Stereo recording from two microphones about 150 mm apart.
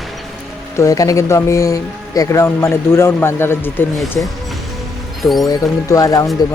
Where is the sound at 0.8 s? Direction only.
20° left (ahead or behind).